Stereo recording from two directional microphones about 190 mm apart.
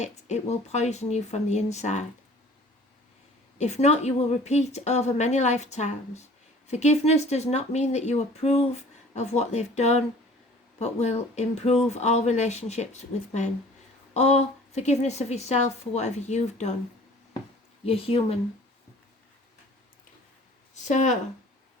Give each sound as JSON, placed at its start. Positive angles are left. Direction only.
{"t": 0.0, "sound": "speech", "side_deg": 35}
{"t": 3.6, "sound": "speech", "side_deg": 35}
{"t": 17.8, "sound": "speech", "side_deg": 30}
{"t": 20.8, "sound": "speech", "side_deg": 40}